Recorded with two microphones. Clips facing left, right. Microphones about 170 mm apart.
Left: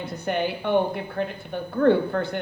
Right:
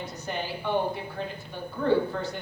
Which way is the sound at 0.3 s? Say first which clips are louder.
Left 7 dB; 60° left (ahead or behind).